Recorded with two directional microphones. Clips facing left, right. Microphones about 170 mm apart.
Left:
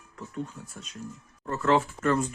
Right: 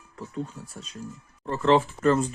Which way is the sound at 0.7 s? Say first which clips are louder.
Right 2 dB; 35° right (ahead or behind).